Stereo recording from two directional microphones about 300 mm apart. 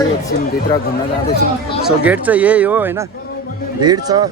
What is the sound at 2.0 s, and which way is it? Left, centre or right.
Speech, centre.